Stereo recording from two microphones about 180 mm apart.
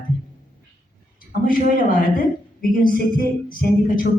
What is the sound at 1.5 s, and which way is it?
Speech, 50° left (ahead or behind).